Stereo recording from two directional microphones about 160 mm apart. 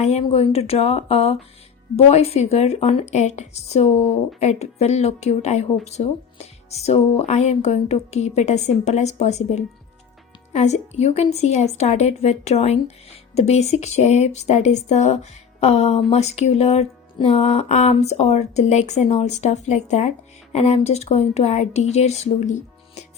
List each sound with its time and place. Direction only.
0.0 s a woman's voice: 40° left (ahead or behind)